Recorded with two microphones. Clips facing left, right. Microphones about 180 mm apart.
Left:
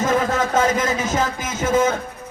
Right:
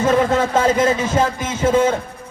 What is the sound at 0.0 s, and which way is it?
Music, 30° right (ahead or behind).